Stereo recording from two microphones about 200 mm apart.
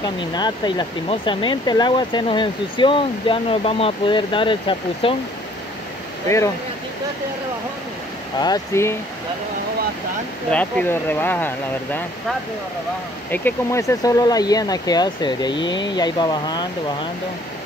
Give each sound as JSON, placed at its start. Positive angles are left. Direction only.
{"t": 0.0, "sound": "speech", "side_deg": 20}
{"t": 6.2, "sound": "speech", "side_deg": 15}
{"t": 8.4, "sound": "speech", "side_deg": 15}
{"t": 10.5, "sound": "speech", "side_deg": 5}
{"t": 13.3, "sound": "speech", "side_deg": 10}